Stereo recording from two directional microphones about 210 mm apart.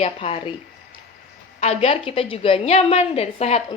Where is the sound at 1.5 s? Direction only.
30° left (ahead or behind).